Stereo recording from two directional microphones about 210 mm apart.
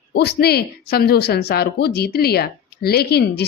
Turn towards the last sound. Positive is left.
turn(degrees=50)  # may be behind; listen again after turning